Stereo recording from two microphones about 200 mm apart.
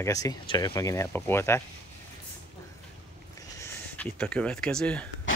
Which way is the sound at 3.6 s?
10° left (ahead or behind).